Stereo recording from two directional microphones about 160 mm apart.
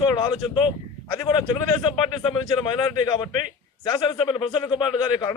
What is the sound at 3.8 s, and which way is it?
A man's voice, 25° left (ahead or behind).